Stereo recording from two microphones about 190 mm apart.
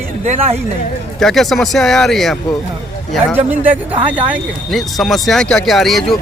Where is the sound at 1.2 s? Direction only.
Centre (ahead or behind).